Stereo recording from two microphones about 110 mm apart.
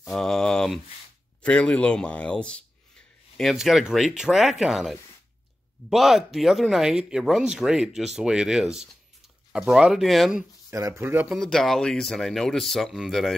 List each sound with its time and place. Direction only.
0.0 s speech: 5° left (ahead or behind)
10.7 s speech: 25° right (ahead or behind)
11.2 s speech: centre (ahead or behind)